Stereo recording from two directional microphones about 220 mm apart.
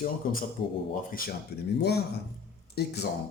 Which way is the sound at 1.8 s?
45° left (ahead or behind).